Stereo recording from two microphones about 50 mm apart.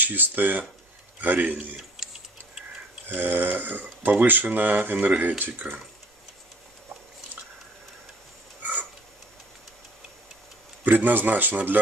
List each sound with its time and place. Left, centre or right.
0.0 s speech: right
2.0 s tick-tock: centre
3.1 s speech: right
10.8 s speech: right